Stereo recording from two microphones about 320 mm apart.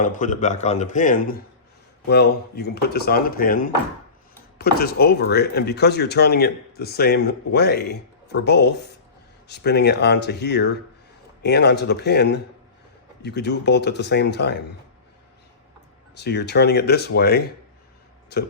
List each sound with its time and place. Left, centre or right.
0.0 s speech: left
16.1 s speech: left